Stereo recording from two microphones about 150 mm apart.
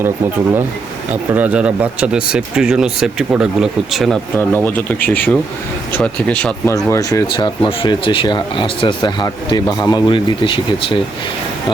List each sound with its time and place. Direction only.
1.1 s speech: 10° right (ahead or behind)
4.4 s speech: 15° left (ahead or behind)
6.7 s speech: 20° left (ahead or behind)